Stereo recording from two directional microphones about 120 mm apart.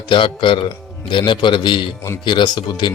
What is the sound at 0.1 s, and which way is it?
Speech, 45° left (ahead or behind).